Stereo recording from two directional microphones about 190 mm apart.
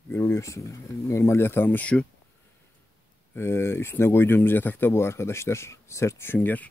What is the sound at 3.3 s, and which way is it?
Speech, 15° left (ahead or behind).